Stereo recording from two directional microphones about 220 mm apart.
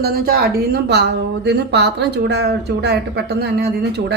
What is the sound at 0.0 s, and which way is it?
Speech, 45° right (ahead or behind).